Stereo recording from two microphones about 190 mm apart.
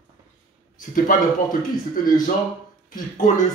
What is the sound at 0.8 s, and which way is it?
Speech, 45° left (ahead or behind).